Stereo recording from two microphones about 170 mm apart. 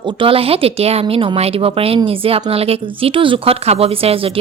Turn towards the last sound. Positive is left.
turn(degrees=-35)  # may be behind; listen again after turning